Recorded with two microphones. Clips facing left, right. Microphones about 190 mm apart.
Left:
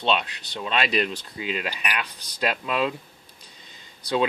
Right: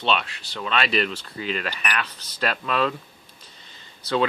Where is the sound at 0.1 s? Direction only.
20° left (ahead or behind).